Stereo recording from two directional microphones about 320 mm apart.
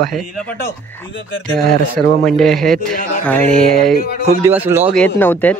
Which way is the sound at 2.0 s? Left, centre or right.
Centre.